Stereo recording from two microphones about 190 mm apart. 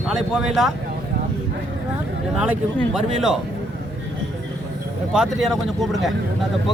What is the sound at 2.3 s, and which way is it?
Speech, 5° right (ahead or behind).